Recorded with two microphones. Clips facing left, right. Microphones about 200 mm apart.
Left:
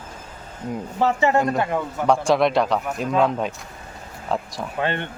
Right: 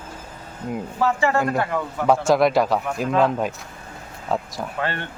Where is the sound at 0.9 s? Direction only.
20° left (ahead or behind).